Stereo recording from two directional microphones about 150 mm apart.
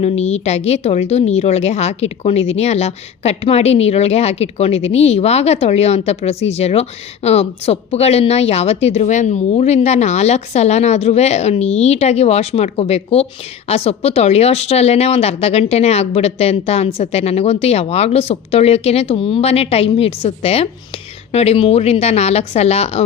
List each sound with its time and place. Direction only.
0.0 s a woman's voice: 45° left (ahead or behind)